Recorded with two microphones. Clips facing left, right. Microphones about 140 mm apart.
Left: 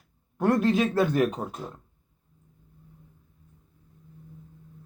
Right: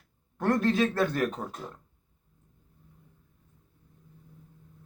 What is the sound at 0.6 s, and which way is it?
Speech, 15° left (ahead or behind).